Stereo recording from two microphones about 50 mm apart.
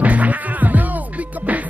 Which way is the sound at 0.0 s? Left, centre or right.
Right.